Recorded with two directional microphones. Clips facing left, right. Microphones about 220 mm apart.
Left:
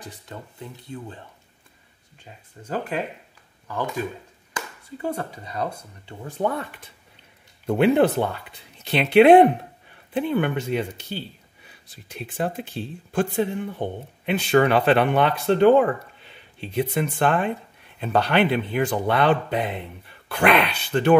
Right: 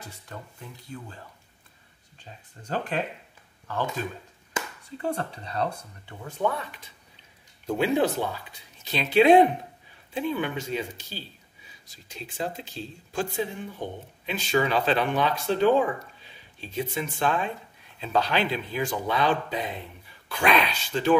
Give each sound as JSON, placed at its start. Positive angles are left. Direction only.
{"t": 0.0, "sound": "speech", "side_deg": 20}
{"t": 2.6, "sound": "speech", "side_deg": 10}
{"t": 5.0, "sound": "speech", "side_deg": 10}
{"t": 6.0, "sound": "speech", "side_deg": 35}
{"t": 7.6, "sound": "speech", "side_deg": 60}